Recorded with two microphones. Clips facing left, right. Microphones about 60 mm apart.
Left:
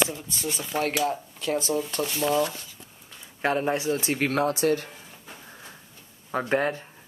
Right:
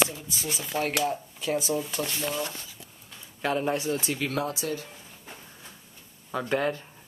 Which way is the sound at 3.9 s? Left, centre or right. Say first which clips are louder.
Left 4 dB; left.